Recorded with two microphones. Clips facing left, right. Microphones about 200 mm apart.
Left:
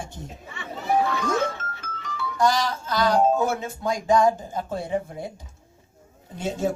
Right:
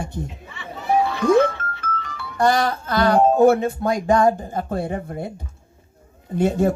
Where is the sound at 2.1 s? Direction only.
60° right (ahead or behind).